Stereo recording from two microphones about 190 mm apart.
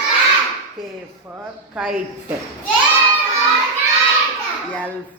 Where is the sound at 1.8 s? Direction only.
5° right (ahead or behind).